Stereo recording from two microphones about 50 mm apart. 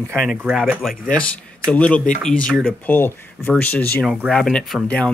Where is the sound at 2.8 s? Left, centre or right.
Left.